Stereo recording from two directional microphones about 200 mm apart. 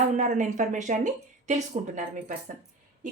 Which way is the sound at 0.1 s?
40° right (ahead or behind).